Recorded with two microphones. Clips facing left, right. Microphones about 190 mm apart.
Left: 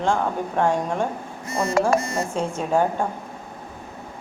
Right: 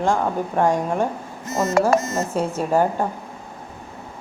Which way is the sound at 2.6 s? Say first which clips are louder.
Right 1 dB; 5° right (ahead or behind).